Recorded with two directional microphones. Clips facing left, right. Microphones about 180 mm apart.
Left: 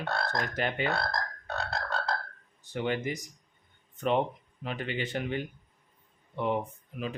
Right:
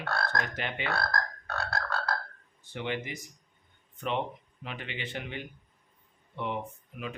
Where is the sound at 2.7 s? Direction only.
40° left (ahead or behind).